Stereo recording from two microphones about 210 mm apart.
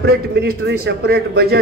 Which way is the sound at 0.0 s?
50° right (ahead or behind).